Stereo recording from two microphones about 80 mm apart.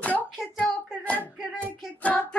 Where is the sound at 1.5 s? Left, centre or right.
Centre.